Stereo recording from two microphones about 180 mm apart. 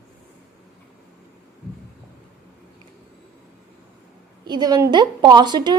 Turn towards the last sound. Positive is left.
turn(degrees=-25)  # may be behind; listen again after turning